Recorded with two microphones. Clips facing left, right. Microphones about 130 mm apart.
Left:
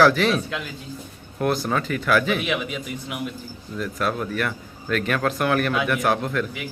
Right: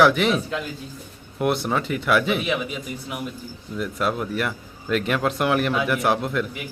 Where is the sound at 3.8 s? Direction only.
20° right (ahead or behind).